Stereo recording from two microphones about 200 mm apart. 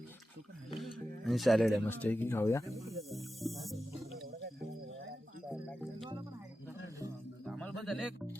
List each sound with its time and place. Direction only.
0.8 s speech: centre (ahead or behind)
2.6 s snake: centre (ahead or behind)
4.4 s a sound: 55° right (ahead or behind)
4.9 s a sound: 65° right (ahead or behind)
5.5 s music: centre (ahead or behind)
7.4 s bird: centre (ahead or behind)